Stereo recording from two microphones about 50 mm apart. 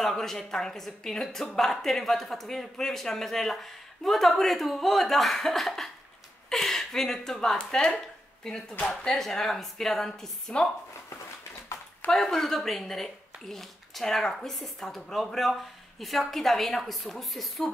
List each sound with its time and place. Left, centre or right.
0.0 s a woman's voice: centre
9.1 s speech: centre
11.7 s a sound: left
12.1 s a woman's voice: centre